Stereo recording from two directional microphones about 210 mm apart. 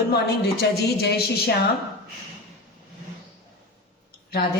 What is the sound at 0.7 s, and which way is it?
Speech, 50° left (ahead or behind).